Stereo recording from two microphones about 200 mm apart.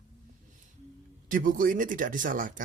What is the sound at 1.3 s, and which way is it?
Speech, 45° right (ahead or behind).